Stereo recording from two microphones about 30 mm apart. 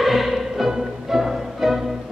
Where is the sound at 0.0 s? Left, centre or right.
Centre.